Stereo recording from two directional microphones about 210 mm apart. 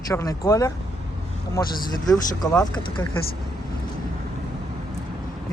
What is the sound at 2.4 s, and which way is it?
Speech, 10° left (ahead or behind).